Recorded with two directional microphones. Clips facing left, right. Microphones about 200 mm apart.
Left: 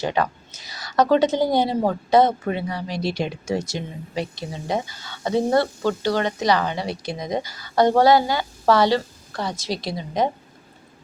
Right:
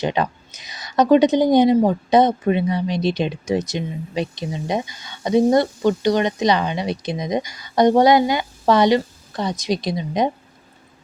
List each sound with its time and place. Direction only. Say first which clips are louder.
0.0 s speech: right 2 dB; 20° right (ahead or behind)